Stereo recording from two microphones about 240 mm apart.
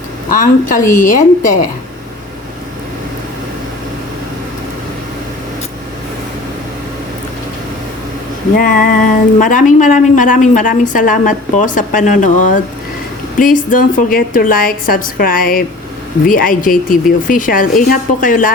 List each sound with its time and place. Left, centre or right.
0.3 s a woman's voice: left
8.5 s a woman's voice: left